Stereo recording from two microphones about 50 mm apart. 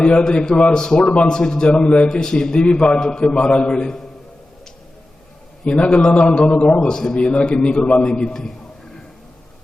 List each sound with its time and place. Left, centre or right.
0.2 s a man's voice: centre
1.3 s a man's voice: centre
5.6 s a man's voice: left